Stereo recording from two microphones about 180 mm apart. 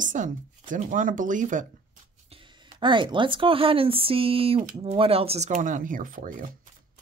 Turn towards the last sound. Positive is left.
turn(degrees=-50)  # may be behind; listen again after turning